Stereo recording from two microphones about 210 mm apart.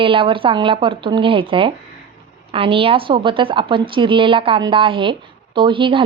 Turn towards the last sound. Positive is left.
turn(degrees=-25)  # may be behind; listen again after turning